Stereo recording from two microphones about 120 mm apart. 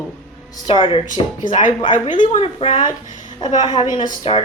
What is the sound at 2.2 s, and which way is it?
Speech, 55° left (ahead or behind).